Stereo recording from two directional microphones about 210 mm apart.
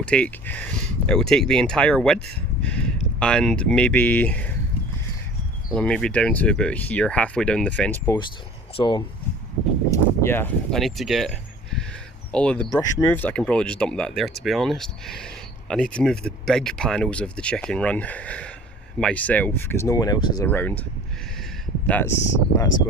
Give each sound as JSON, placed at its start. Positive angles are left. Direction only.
{"t": 0.0, "sound": "speech", "side_deg": 5}
{"t": 5.7, "sound": "speech", "side_deg": 5}
{"t": 8.7, "sound": "speech", "side_deg": 20}
{"t": 9.9, "sound": "speech", "side_deg": 10}
{"t": 12.7, "sound": "speech", "side_deg": 15}
{"t": 21.8, "sound": "speech", "side_deg": 10}